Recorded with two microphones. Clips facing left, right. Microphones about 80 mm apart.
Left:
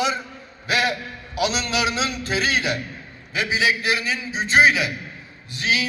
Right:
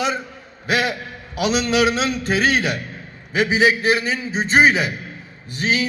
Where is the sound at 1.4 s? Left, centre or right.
Right.